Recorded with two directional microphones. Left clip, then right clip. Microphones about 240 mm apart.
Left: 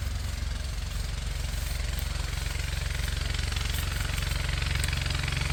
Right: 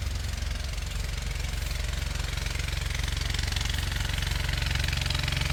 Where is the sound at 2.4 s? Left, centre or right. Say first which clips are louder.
Right 2 dB; right.